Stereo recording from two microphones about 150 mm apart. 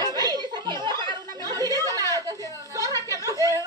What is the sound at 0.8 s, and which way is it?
Chatter, 30° right (ahead or behind).